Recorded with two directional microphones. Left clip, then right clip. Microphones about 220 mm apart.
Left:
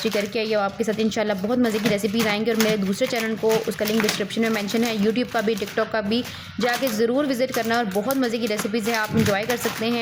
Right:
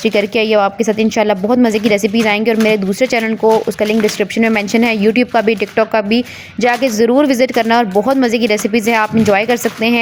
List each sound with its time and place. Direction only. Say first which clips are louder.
0.0 s a woman's voice: right 10 dB; 30° right (ahead or behind)